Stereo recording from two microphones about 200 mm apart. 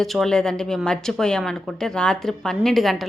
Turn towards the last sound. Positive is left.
turn(degrees=0)  # may be behind; listen again after turning